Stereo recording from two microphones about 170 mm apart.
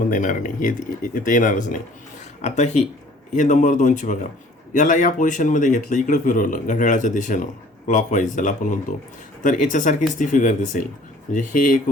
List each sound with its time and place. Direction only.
0.0 s speech: 50° left (ahead or behind)
3.3 s speech: 45° left (ahead or behind)